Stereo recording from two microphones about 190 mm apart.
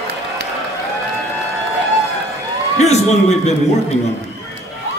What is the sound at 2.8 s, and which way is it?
Speech, 35° left (ahead or behind).